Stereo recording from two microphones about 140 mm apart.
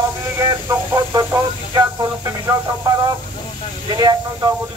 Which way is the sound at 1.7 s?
25° right (ahead or behind).